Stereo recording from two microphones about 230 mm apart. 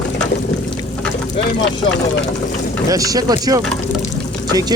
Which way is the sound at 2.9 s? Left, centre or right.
Centre.